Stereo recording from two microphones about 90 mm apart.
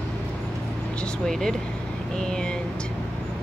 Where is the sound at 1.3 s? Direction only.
5° left (ahead or behind).